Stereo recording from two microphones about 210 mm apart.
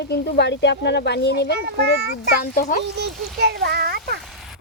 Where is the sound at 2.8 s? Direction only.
55° right (ahead or behind).